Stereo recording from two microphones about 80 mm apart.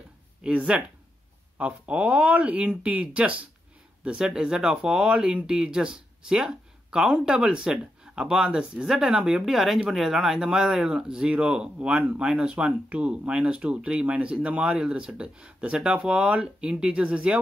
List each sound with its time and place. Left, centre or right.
0.4 s speech: centre